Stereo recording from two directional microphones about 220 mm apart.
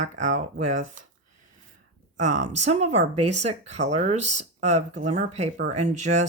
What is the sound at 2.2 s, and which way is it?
Speech, 35° right (ahead or behind).